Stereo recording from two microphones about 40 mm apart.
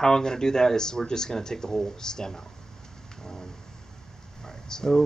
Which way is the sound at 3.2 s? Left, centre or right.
Centre.